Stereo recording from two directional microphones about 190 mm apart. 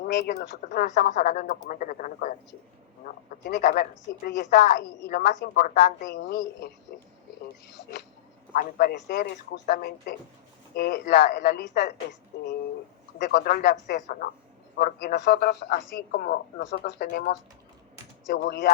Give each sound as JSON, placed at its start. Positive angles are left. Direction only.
{"t": 0.0, "sound": "speech", "side_deg": 60}
{"t": 0.7, "sound": "a woman's voice", "side_deg": 40}
{"t": 7.7, "sound": "speech", "side_deg": 65}
{"t": 8.5, "sound": "speech", "side_deg": 55}
{"t": 13.3, "sound": "a woman's voice", "side_deg": 50}
{"t": 18.4, "sound": "speech", "side_deg": 60}